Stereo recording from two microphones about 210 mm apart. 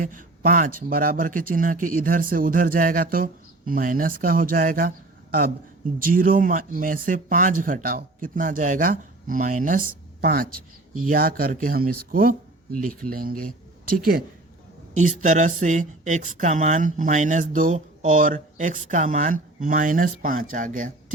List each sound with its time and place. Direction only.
0.0 s speech: 40° right (ahead or behind)
14.9 s speech: 35° right (ahead or behind)